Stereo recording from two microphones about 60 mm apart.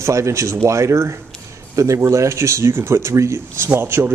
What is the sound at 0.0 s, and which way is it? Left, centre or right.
Speech, right.